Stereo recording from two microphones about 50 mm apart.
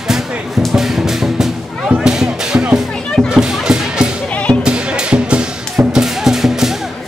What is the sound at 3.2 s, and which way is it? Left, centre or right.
Music, right.